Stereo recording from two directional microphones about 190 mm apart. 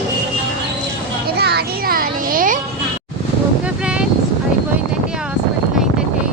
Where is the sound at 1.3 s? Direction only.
55° right (ahead or behind).